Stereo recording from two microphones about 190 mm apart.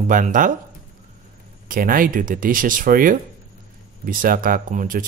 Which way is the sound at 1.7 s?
45° right (ahead or behind).